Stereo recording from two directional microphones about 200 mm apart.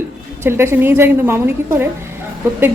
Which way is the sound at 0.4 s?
10° right (ahead or behind).